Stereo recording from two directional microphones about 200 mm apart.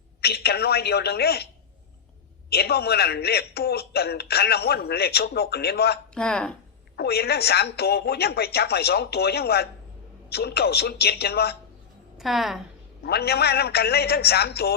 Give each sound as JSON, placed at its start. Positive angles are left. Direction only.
{"t": 0.2, "sound": "speech", "side_deg": 55}
{"t": 2.5, "sound": "speech", "side_deg": 55}
{"t": 6.1, "sound": "a woman's voice", "side_deg": 5}
{"t": 6.9, "sound": "speech", "side_deg": 55}
{"t": 12.1, "sound": "a woman's voice", "side_deg": 0}
{"t": 13.0, "sound": "speech", "side_deg": 55}